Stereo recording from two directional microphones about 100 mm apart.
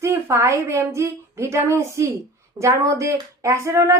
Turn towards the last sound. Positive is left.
turn(degrees=-35)  # may be behind; listen again after turning